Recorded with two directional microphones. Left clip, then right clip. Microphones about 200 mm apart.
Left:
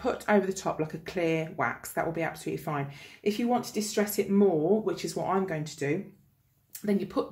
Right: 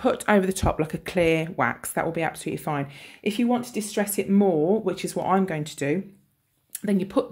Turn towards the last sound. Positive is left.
turn(degrees=-45)  # may be behind; listen again after turning